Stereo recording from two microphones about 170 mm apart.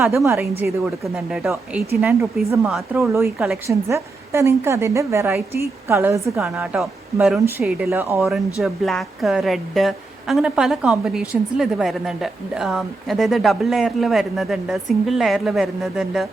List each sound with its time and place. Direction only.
0.1 s a woman's voice: 15° right (ahead or behind)
2.9 s a woman's voice: 15° right (ahead or behind)
3.7 s a woman's voice: 15° right (ahead or behind)
6.4 s a woman's voice: 5° right (ahead or behind)
8.2 s speech: centre (ahead or behind)